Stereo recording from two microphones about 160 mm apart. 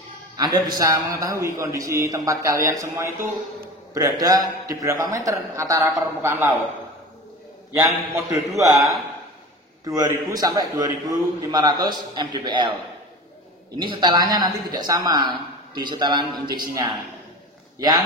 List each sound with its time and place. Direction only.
0.4 s a man's voice: 25° right (ahead or behind)
7.8 s a man's voice: 20° right (ahead or behind)
9.8 s a man's voice: 20° right (ahead or behind)